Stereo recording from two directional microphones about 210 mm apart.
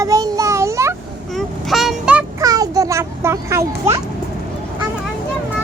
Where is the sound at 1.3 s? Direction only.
Centre (ahead or behind).